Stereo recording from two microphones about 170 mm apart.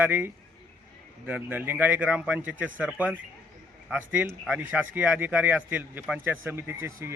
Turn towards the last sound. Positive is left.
turn(degrees=-15)  # may be behind; listen again after turning